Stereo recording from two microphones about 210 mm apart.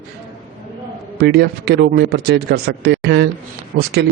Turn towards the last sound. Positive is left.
turn(degrees=-50)  # may be behind; listen again after turning